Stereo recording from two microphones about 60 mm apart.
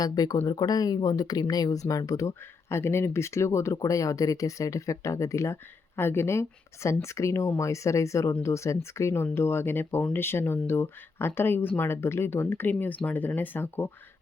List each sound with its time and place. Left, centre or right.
0.0 s speech: left
2.6 s speech: left
3.8 s speech: left
6.0 s speech: left
9.3 s speech: left